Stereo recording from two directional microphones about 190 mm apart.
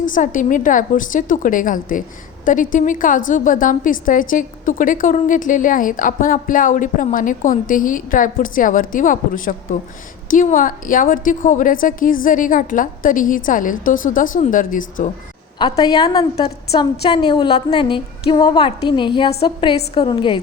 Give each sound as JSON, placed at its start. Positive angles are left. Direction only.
{"t": 0.0, "sound": "a woman's voice", "side_deg": 45}
{"t": 15.5, "sound": "a woman's voice", "side_deg": 25}